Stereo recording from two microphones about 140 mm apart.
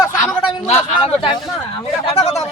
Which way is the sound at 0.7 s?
40° left (ahead or behind).